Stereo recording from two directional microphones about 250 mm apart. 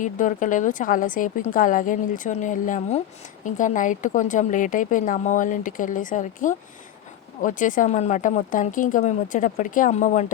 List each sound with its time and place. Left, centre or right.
0.0 s a woman's voice: left